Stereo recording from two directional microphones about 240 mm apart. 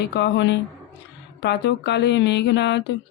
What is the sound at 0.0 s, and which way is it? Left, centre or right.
Speech, left.